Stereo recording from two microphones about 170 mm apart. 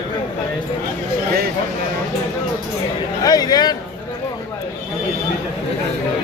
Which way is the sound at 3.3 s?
25° left (ahead or behind).